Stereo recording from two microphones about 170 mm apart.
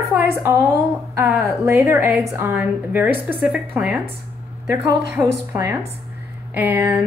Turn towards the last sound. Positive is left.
turn(degrees=-15)  # may be behind; listen again after turning